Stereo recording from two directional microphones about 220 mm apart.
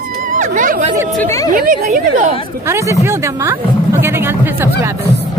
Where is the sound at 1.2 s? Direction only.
15° left (ahead or behind).